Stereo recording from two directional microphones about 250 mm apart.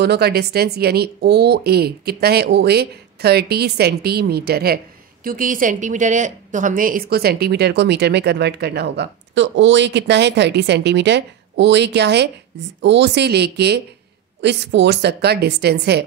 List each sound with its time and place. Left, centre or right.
0.0 s a woman's voice: right